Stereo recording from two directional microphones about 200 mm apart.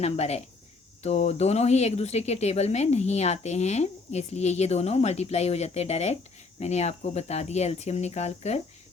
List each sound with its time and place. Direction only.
0.0 s speech: 30° left (ahead or behind)